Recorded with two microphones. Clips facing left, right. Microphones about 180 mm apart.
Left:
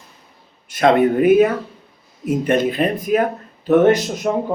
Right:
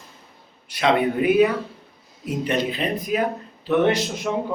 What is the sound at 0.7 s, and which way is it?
Speech, 45° left (ahead or behind).